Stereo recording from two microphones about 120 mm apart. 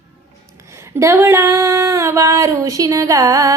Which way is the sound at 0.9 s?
20° right (ahead or behind).